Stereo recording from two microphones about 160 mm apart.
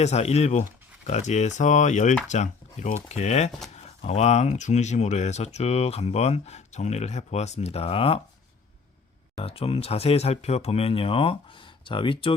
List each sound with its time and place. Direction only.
0.0 s speech: 40° left (ahead or behind)
9.3 s speech: 35° left (ahead or behind)